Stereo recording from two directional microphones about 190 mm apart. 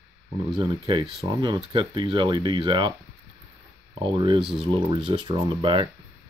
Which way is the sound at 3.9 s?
25° right (ahead or behind).